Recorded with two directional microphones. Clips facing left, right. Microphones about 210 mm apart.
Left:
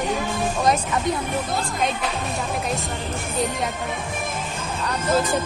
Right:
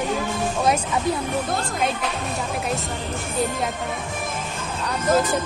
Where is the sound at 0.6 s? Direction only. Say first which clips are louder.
Even; 10° right (ahead or behind).